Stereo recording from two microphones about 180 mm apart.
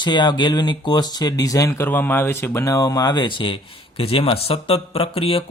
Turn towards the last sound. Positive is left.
turn(degrees=30)  # may be behind; listen again after turning